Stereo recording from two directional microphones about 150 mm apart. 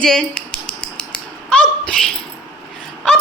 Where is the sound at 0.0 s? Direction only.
5° left (ahead or behind).